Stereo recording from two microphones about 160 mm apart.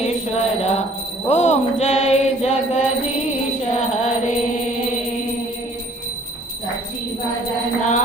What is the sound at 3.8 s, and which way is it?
Music, 45° left (ahead or behind).